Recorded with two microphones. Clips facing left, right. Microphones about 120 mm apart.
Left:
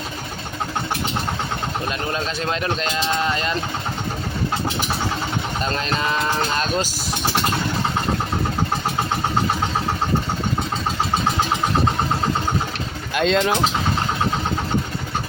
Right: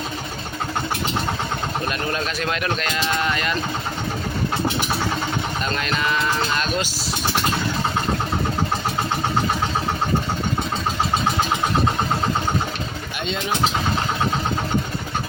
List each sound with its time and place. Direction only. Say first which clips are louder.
2.1 s speech: left 1 dB; 25° left (ahead or behind)
5.7 s speech: even; 35° left (ahead or behind)
13.1 s speech: left 9 dB; 90° left